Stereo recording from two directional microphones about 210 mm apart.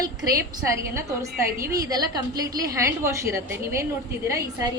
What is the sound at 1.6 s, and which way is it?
A woman's voice, 15° right (ahead or behind).